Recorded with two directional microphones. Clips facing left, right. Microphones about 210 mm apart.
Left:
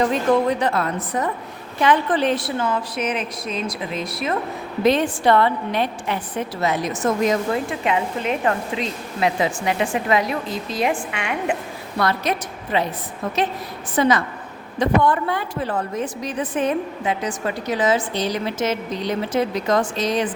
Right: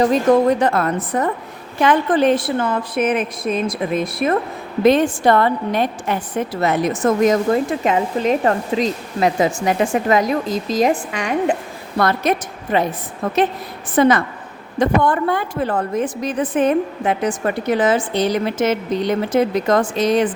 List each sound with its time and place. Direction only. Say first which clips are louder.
0.0 s a woman's voice: right 4 dB; 40° right (ahead or behind)
11.9 s a woman's voice: right 4 dB; 50° right (ahead or behind)
13.9 s a woman's voice: right 4 dB; 55° right (ahead or behind)